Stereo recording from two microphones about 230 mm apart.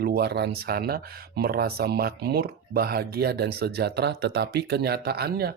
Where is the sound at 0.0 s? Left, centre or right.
Right.